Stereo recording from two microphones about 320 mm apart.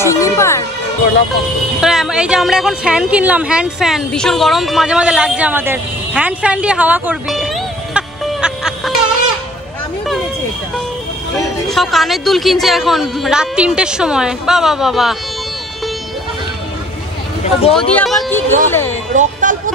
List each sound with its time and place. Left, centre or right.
0.0 s speech: centre
1.8 s speech: centre
11.3 s a man's voice: centre
17.4 s speech: centre
17.7 s a sound: centre
18.7 s speech: centre
19.1 s speech: right